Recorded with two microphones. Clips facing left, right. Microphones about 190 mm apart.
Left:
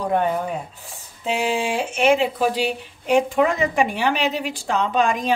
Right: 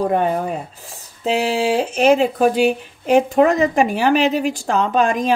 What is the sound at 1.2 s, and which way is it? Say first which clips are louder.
Speech: right 4 dB; 35° right (ahead or behind).